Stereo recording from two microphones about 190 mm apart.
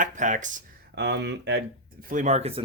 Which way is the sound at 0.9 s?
65° right (ahead or behind).